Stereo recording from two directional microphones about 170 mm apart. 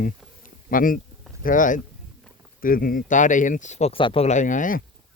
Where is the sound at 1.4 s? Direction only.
50° left (ahead or behind).